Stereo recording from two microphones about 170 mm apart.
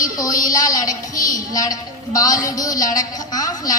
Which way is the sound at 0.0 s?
20° left (ahead or behind).